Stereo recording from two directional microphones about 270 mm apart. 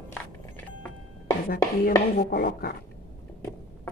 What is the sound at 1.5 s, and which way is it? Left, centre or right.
Chopping, left.